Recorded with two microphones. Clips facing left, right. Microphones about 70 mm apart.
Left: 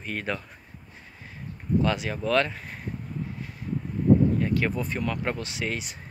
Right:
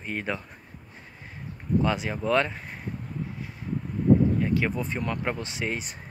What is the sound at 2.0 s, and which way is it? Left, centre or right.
Speech, centre.